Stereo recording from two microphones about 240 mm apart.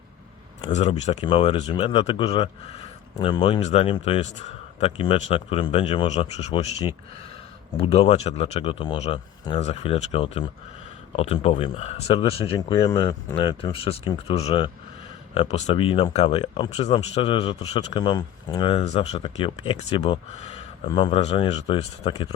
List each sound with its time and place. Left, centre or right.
0.7 s speech: left
7.8 s speech: left